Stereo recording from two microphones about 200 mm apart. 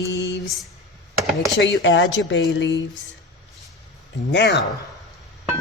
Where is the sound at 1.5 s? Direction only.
65° left (ahead or behind).